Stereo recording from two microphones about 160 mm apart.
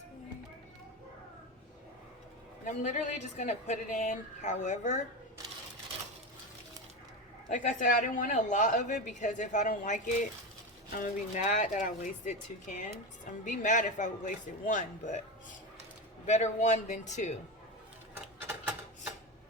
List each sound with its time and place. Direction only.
2.6 s a woman's voice: 50° left (ahead or behind)
7.5 s a woman's voice: 50° left (ahead or behind)
16.2 s a woman's voice: 45° left (ahead or behind)